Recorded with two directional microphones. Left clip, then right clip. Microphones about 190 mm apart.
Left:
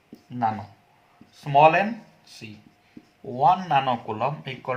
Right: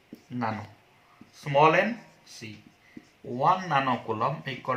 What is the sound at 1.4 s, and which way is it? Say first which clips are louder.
Speech: left 4 dB; 50° left (ahead or behind).